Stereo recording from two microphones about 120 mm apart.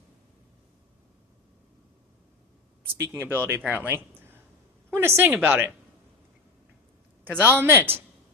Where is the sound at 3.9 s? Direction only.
15° right (ahead or behind).